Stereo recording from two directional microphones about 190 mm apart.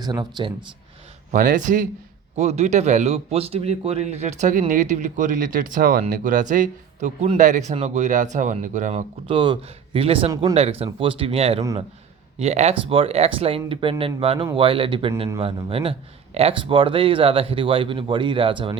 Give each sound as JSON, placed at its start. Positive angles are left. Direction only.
{"t": 0.0, "sound": "speech", "side_deg": -20}
{"t": 1.3, "sound": "speech", "side_deg": -45}
{"t": 9.2, "sound": "speech", "side_deg": -25}
{"t": 11.6, "sound": "a man's voice", "side_deg": -20}
{"t": 12.4, "sound": "speech", "side_deg": -35}